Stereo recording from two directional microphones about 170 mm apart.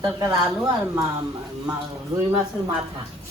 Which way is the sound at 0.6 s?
20° right (ahead or behind).